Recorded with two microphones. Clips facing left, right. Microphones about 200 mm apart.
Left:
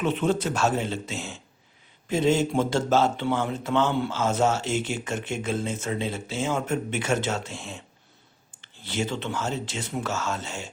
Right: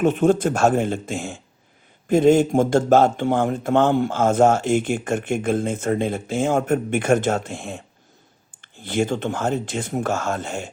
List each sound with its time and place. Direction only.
0.0 s speech: 50° right (ahead or behind)